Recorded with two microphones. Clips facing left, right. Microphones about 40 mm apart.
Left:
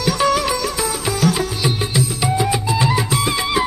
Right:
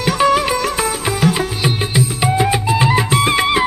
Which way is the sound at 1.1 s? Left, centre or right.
Right.